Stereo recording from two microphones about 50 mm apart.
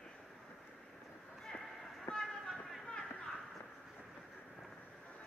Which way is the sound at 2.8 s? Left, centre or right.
Centre.